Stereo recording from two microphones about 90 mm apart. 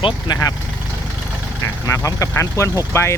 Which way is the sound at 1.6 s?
40° left (ahead or behind).